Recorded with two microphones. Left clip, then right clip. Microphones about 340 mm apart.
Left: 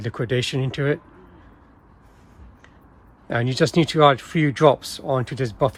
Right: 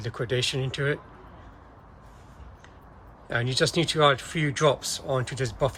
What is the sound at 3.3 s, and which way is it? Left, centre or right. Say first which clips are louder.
Speech: left 4 dB; centre.